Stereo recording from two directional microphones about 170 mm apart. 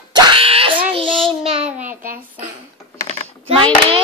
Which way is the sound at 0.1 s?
25° right (ahead or behind).